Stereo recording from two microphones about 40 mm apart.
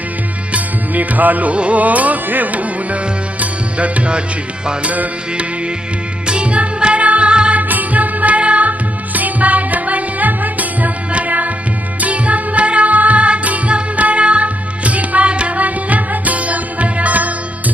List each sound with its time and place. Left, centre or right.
0.5 s music: right
4.9 s music: right
6.2 s music: right
7.5 s music: right